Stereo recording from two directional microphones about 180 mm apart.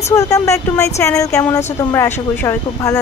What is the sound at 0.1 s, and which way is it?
Speech, 15° left (ahead or behind).